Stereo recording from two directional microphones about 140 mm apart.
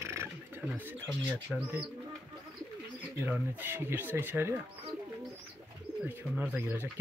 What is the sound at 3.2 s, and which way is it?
Speech, 15° right (ahead or behind).